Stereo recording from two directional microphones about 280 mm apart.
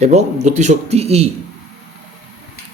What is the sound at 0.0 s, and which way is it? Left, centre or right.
Speech, right.